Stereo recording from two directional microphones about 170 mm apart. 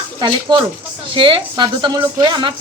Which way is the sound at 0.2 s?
30° right (ahead or behind).